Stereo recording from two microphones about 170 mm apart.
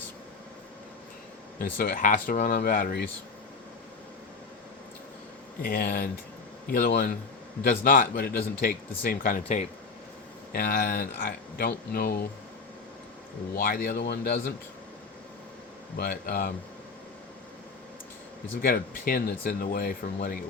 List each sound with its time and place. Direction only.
1.5 s speech: 55° left (ahead or behind)
5.6 s speech: 60° left (ahead or behind)
10.5 s speech: 60° left (ahead or behind)
13.6 s speech: 70° left (ahead or behind)
16.0 s speech: 60° left (ahead or behind)
18.6 s speech: 60° left (ahead or behind)